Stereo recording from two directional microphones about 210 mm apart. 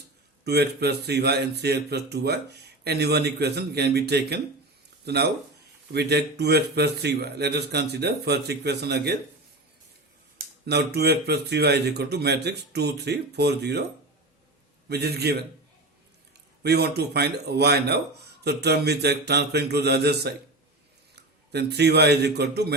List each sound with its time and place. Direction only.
0.4 s a man's voice: 50° right (ahead or behind)
10.7 s a man's voice: 50° right (ahead or behind)
14.8 s a man's voice: 50° right (ahead or behind)
16.6 s a man's voice: 50° right (ahead or behind)
21.5 s a man's voice: 50° right (ahead or behind)